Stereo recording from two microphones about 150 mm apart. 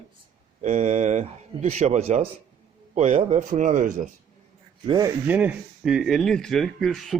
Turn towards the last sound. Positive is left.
turn(degrees=0)  # may be behind; listen again after turning